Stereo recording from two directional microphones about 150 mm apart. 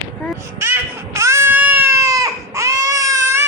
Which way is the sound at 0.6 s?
15° right (ahead or behind).